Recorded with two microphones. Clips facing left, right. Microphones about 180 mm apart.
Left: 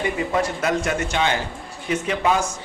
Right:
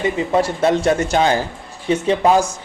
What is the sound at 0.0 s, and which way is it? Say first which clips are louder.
A man's voice: right 5 dB; 25° right (ahead or behind).